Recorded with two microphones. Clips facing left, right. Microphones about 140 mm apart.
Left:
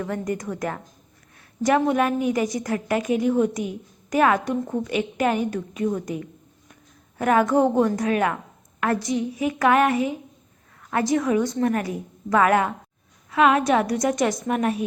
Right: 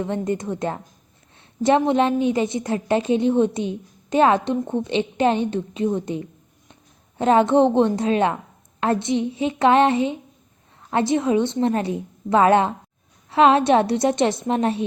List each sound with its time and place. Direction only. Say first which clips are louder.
0.0 s a woman's voice: right 3 dB; 25° right (ahead or behind)